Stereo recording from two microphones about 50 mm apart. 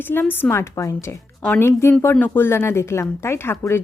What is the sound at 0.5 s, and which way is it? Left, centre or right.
Speech, left.